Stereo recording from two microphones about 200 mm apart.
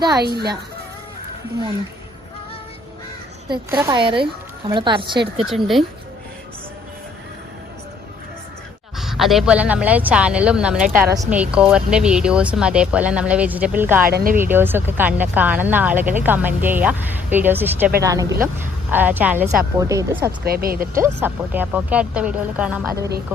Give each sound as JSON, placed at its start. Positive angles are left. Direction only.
{"t": 0.2, "sound": "speech", "side_deg": -55}
{"t": 3.7, "sound": "speech", "side_deg": -10}
{"t": 3.9, "sound": "a woman's voice", "side_deg": -25}
{"t": 5.5, "sound": "speech", "side_deg": 0}
{"t": 9.0, "sound": "speech", "side_deg": 0}
{"t": 14.1, "sound": "speech", "side_deg": -50}
{"t": 14.3, "sound": "speech", "side_deg": -10}
{"t": 20.4, "sound": "speech", "side_deg": -50}
{"t": 21.0, "sound": "speech", "side_deg": -10}